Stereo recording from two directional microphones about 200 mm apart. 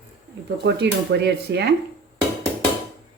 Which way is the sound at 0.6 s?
60° right (ahead or behind).